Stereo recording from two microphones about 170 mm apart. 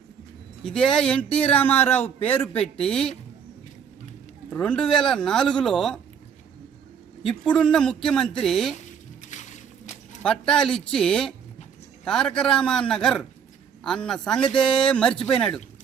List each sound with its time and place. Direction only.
0.6 s speech: 5° left (ahead or behind)
4.4 s speech: 5° left (ahead or behind)
7.2 s speech: 5° left (ahead or behind)
8.8 s a sound: 45° left (ahead or behind)
10.2 s speech: 5° left (ahead or behind)